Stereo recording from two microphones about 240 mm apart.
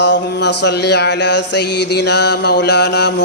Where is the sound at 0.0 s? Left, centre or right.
Left.